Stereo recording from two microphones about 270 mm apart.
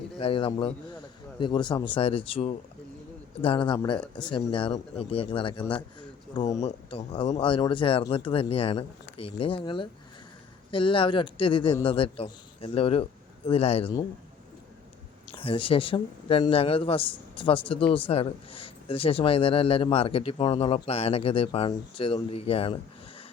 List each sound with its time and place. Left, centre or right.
0.2 s a man's voice: centre
15.3 s speech: left